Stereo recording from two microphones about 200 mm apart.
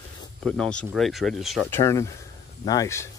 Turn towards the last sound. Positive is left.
turn(degrees=15)  # may be behind; listen again after turning